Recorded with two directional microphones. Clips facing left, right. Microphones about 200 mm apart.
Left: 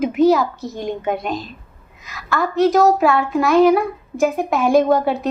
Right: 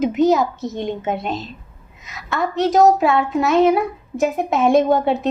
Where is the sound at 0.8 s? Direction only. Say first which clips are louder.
Left 1 dB; 25° right (ahead or behind).